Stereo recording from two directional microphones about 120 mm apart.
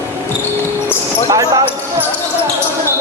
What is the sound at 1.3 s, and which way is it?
Basketball bounce, 30° right (ahead or behind).